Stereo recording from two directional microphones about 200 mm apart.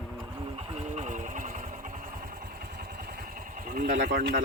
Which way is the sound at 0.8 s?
30° right (ahead or behind).